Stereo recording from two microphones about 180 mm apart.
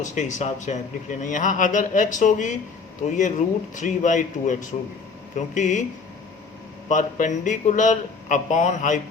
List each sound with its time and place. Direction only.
0.0 s a man's voice: 40° left (ahead or behind)
6.8 s a man's voice: 45° left (ahead or behind)